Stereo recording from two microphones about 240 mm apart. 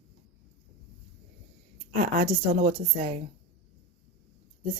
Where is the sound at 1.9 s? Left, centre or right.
Right.